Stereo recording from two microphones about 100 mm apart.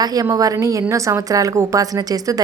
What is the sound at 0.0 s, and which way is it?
Speech, 40° right (ahead or behind).